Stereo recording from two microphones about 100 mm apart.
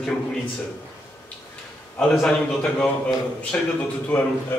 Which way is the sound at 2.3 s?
10° left (ahead or behind).